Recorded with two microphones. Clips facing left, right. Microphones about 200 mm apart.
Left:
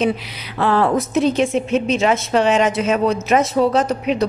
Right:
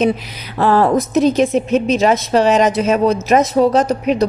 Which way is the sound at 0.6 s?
40° right (ahead or behind).